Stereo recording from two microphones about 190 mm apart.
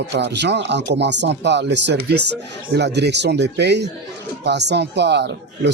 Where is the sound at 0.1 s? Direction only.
65° right (ahead or behind).